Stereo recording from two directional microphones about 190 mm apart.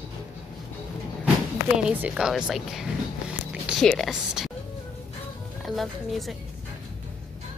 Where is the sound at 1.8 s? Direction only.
5° right (ahead or behind).